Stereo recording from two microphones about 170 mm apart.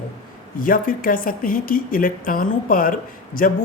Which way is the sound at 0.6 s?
55° left (ahead or behind).